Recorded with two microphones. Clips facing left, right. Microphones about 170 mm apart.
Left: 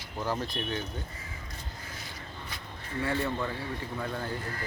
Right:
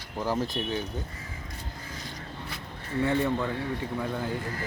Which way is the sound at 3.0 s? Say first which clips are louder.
Right 5 dB; 15° right (ahead or behind).